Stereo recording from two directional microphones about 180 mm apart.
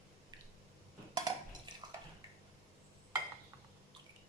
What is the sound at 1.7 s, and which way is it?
Dishes, 25° right (ahead or behind).